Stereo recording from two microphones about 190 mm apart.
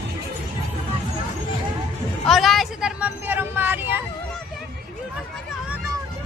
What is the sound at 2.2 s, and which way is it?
Vehicle, centre (ahead or behind).